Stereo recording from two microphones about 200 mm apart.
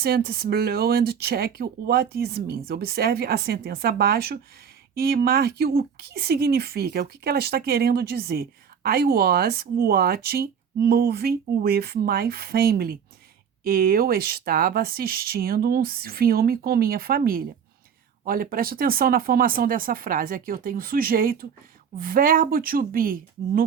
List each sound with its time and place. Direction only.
0.0 s speech: 50° right (ahead or behind)